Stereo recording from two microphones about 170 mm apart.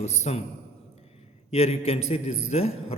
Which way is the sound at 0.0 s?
40° left (ahead or behind).